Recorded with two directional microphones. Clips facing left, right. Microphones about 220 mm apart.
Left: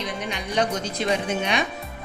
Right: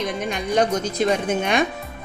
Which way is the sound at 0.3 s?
45° right (ahead or behind).